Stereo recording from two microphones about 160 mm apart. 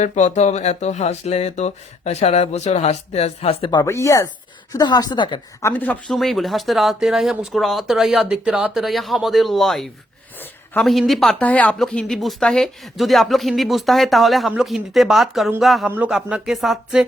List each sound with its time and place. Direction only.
0.0 s a woman's voice: 45° left (ahead or behind); by 5.4 s 30° left (ahead or behind)
5.6 s speech: 10° left (ahead or behind)